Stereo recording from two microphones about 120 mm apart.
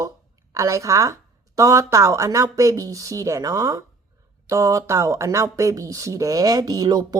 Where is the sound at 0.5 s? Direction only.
25° right (ahead or behind).